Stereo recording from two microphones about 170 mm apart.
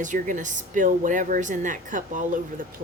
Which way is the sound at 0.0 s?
50° right (ahead or behind).